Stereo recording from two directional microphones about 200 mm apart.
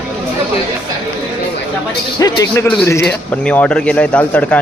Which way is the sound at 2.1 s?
20° left (ahead or behind).